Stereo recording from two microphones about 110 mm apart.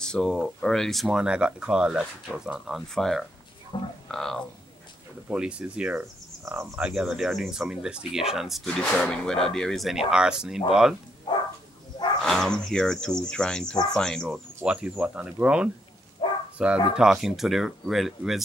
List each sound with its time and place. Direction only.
0.0 s speech: 5° left (ahead or behind)
3.7 s speech: 45° left (ahead or behind)
4.1 s speech: 5° left (ahead or behind)
5.3 s speech: 10° right (ahead or behind)
11.3 s bow-wow: 40° left (ahead or behind)
12.2 s speech: 5° left (ahead or behind)
14.3 s speech: 10° right (ahead or behind)
16.2 s bow-wow: 45° left (ahead or behind)
16.5 s speech: 10° right (ahead or behind)